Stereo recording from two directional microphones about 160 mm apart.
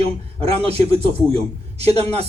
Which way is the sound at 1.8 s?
40° right (ahead or behind).